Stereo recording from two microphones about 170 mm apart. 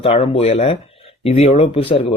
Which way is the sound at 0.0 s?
35° left (ahead or behind).